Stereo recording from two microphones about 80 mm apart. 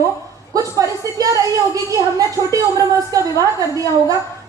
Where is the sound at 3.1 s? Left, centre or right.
Right.